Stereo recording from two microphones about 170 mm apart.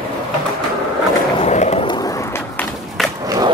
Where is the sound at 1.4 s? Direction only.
40° left (ahead or behind).